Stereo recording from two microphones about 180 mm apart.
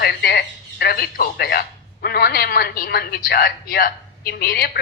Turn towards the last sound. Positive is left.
turn(degrees=60)  # may be behind; listen again after turning